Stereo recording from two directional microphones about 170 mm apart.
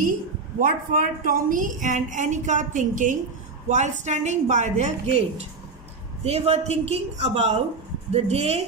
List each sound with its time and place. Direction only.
0.6 s a woman's voice: 50° right (ahead or behind)
6.2 s a woman's voice: 40° right (ahead or behind)